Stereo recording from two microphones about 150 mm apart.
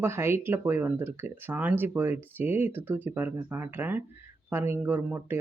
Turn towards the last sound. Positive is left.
turn(degrees=-10)  # may be behind; listen again after turning